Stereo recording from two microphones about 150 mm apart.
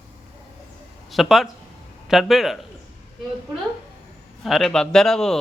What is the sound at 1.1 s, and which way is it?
Speech, centre (ahead or behind).